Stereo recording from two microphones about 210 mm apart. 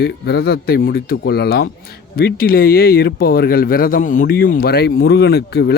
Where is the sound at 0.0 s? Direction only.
50° left (ahead or behind).